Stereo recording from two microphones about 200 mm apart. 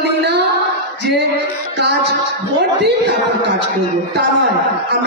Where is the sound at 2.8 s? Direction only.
55° right (ahead or behind).